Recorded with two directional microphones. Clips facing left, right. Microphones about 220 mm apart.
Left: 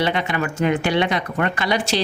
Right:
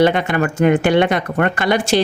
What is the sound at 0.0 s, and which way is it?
Speech, 50° right (ahead or behind).